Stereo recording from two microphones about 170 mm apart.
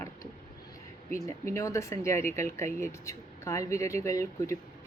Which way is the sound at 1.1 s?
15° left (ahead or behind).